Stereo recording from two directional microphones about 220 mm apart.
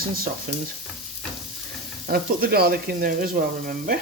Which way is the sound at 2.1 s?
45° right (ahead or behind).